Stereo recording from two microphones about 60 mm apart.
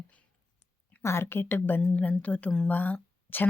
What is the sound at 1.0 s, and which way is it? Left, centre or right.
Speech, left.